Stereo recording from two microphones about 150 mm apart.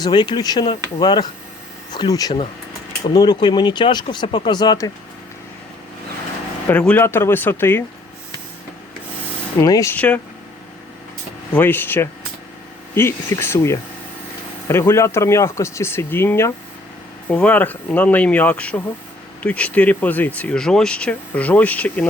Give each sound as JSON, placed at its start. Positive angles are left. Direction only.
{"t": 0.0, "sound": "speech", "side_deg": 30}
{"t": 6.7, "sound": "speech", "side_deg": 10}
{"t": 9.6, "sound": "speech", "side_deg": 25}
{"t": 9.9, "sound": "speech", "side_deg": 10}
{"t": 11.5, "sound": "speech", "side_deg": 15}